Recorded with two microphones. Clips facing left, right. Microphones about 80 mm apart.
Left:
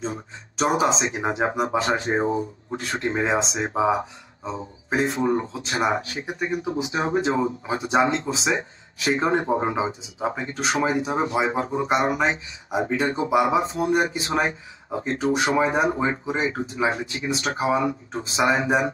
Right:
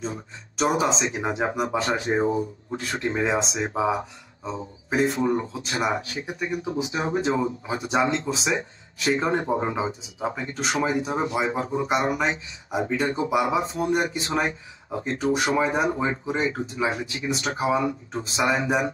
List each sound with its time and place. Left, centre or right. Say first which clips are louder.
0.0 s speech: left 2 dB; left
4.0 s speech: left 2 dB; centre
4.8 s speech: even; left